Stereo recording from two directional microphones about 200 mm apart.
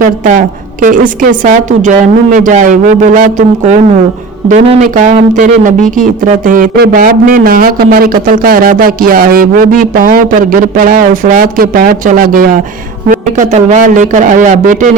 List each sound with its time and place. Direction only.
0.0 s a woman's voice: 40° right (ahead or behind)